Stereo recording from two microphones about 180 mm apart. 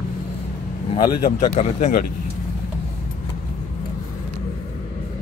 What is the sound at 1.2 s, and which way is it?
Speech, 40° left (ahead or behind).